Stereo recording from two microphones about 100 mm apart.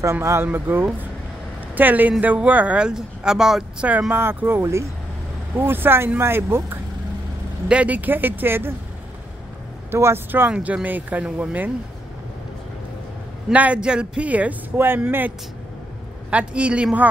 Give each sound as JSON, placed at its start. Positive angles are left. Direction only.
{"t": 0.0, "sound": "speech", "side_deg": -30}
{"t": 4.1, "sound": "speech", "side_deg": -20}
{"t": 7.6, "sound": "speech", "side_deg": -10}
{"t": 9.8, "sound": "speech", "side_deg": -25}
{"t": 13.5, "sound": "speech", "side_deg": -15}